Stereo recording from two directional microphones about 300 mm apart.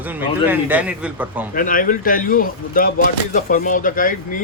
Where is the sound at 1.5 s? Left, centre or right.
Left.